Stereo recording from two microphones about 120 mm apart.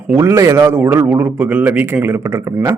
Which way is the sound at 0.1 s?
20° right (ahead or behind).